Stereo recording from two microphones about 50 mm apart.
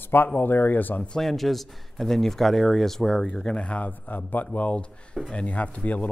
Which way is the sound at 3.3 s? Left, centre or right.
Centre.